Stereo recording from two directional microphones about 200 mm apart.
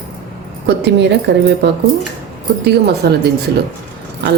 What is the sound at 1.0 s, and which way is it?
Speech, 60° right (ahead or behind).